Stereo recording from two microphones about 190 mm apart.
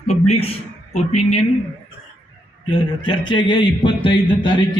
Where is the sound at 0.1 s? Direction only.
35° left (ahead or behind).